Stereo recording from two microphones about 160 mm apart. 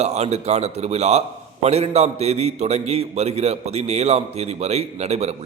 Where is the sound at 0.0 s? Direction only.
45° right (ahead or behind).